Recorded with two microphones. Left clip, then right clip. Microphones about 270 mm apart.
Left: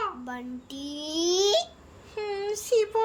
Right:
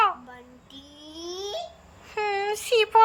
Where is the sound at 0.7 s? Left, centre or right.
Left.